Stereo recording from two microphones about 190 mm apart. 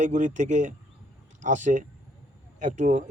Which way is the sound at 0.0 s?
40° right (ahead or behind).